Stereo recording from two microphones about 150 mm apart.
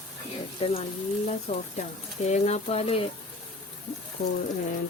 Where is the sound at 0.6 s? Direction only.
40° left (ahead or behind).